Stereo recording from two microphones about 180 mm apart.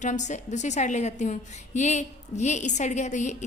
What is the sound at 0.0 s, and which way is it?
A woman's voice, 40° left (ahead or behind).